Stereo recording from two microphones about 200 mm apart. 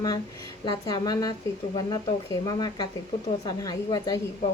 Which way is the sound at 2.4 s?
20° left (ahead or behind).